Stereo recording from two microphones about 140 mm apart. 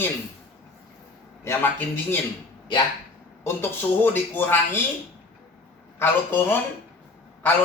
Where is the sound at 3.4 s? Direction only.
15° left (ahead or behind).